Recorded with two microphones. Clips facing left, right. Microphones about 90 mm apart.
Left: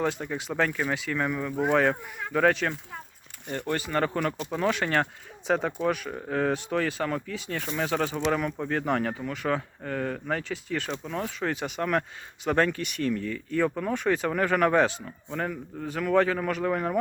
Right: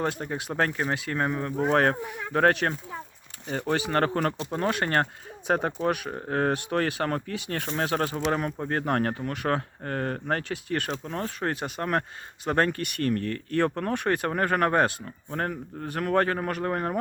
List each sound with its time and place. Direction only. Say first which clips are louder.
0.0 s speech: even; 45° right (ahead or behind)
1.7 s speech: right 1 dB; 50° right (ahead or behind)
3.7 s speech: right 2 dB; 70° right (ahead or behind)
4.5 s speech: left 1 dB; 50° right (ahead or behind)
8.2 s speech: even; 40° right (ahead or behind)
9.2 s speech: right 1 dB; 60° right (ahead or behind)
11.3 s speech: even; 45° right (ahead or behind)
14.3 s speech: left 1 dB; 40° right (ahead or behind)